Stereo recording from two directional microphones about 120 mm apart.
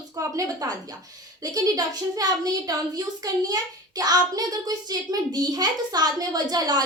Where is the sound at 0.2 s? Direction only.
30° right (ahead or behind).